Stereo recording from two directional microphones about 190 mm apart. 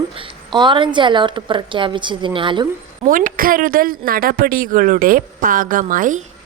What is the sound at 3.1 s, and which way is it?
Speech, 45° right (ahead or behind).